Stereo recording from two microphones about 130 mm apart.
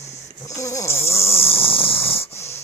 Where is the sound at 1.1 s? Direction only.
50° left (ahead or behind).